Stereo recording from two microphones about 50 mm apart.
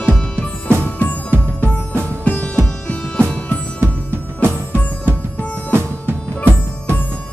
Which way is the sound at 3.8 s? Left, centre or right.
Right.